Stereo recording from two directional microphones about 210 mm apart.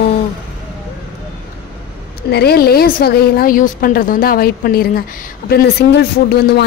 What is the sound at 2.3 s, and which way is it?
A woman's voice, 50° left (ahead or behind).